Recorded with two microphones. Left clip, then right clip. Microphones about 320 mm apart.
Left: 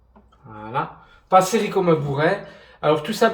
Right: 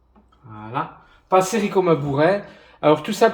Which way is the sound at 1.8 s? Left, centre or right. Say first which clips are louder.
Right 3 dB; right.